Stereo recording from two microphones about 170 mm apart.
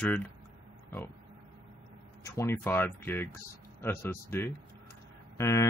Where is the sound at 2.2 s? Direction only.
15° left (ahead or behind).